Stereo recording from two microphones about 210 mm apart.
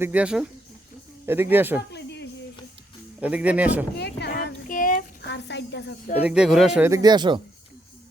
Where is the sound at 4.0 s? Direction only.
50° left (ahead or behind).